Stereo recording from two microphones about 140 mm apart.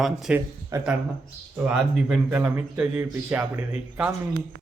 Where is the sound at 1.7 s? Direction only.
5° right (ahead or behind).